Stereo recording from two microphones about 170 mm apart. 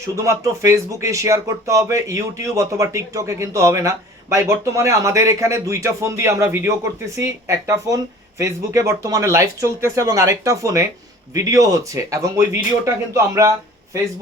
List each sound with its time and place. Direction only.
0.2 s a man's voice: 20° right (ahead or behind)